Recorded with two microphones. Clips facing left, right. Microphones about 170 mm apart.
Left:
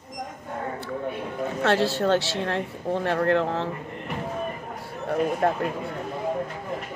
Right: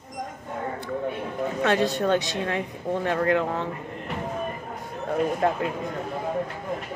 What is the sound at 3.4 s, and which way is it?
Speech, 75° left (ahead or behind).